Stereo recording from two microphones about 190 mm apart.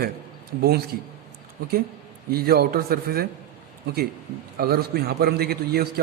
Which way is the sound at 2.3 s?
55° right (ahead or behind).